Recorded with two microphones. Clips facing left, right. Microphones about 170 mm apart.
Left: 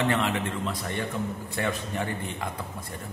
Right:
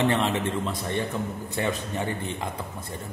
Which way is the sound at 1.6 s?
25° right (ahead or behind).